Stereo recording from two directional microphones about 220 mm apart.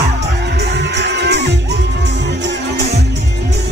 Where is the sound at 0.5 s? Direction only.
50° right (ahead or behind).